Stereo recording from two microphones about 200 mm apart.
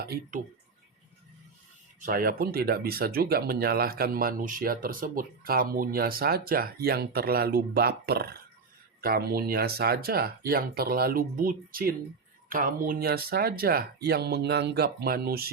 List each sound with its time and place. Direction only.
0.0 s speech: 45° right (ahead or behind)
2.0 s speech: 45° right (ahead or behind)